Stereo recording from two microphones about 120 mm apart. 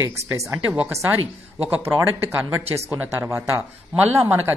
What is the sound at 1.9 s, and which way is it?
Speech, 20° right (ahead or behind).